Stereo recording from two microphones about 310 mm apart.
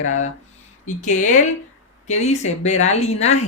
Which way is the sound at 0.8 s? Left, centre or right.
Left.